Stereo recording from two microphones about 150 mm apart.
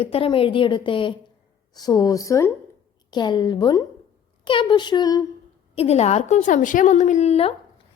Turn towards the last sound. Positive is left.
turn(degrees=40)  # may be behind; listen again after turning